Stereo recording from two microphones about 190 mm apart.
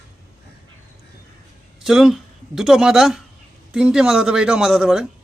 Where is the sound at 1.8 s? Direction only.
Centre (ahead or behind).